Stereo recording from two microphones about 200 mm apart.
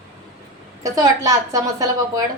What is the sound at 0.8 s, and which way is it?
A woman's voice, 15° right (ahead or behind).